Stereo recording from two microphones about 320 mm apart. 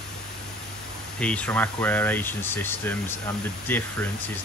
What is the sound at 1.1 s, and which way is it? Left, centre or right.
Speech, centre.